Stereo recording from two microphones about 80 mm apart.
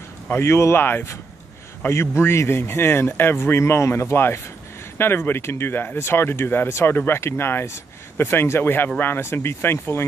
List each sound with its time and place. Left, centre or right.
0.3 s speech: left